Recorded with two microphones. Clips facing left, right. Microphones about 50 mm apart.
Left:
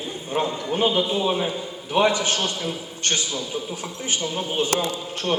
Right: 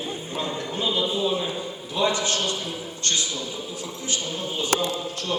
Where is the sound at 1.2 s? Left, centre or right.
Left.